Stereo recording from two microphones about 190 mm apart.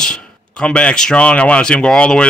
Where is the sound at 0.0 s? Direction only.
5° left (ahead or behind).